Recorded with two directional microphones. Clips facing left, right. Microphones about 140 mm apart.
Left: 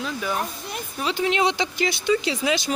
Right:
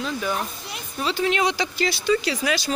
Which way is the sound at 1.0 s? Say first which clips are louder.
Even; 15° left (ahead or behind).